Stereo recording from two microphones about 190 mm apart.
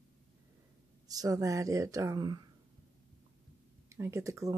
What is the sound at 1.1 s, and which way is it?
Speech, 20° right (ahead or behind).